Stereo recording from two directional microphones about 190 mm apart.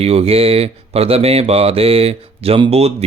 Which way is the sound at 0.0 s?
35° right (ahead or behind).